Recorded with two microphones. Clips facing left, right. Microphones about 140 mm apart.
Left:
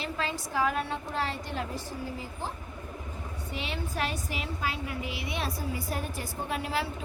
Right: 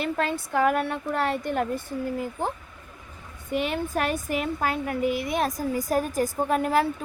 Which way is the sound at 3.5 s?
50° right (ahead or behind).